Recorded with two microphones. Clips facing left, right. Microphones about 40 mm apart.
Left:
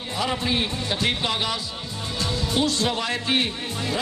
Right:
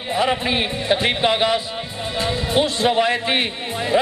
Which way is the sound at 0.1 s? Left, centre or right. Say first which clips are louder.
Right 5 dB; right.